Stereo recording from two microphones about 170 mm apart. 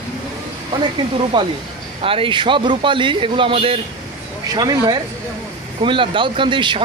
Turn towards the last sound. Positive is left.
turn(degrees=-30)  # may be behind; listen again after turning